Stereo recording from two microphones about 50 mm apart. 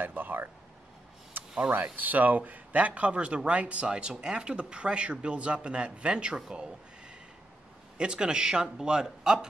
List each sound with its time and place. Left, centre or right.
0.0 s speech: right
1.3 s a sound: right
2.0 s a man's voice: right; by 6.4 s centre
8.0 s speech: centre